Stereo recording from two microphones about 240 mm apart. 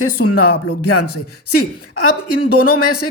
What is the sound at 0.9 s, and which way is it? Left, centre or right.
Speech, left.